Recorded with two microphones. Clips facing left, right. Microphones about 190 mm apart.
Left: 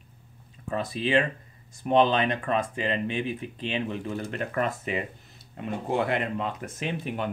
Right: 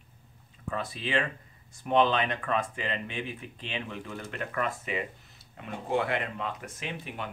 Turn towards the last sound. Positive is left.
turn(degrees=30)  # may be behind; listen again after turning